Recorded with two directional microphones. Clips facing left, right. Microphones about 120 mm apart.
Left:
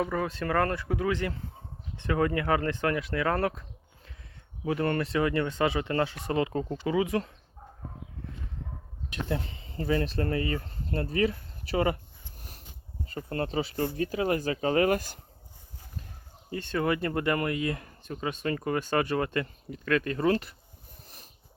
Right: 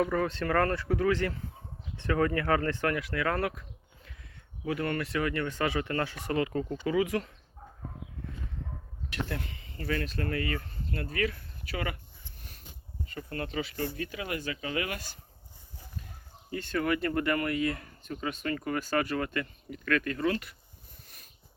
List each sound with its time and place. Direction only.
0.0 s speech: 15° left (ahead or behind)
9.0 s speech: 20° left (ahead or behind)
13.1 s speech: 35° left (ahead or behind)
16.5 s speech: 25° left (ahead or behind)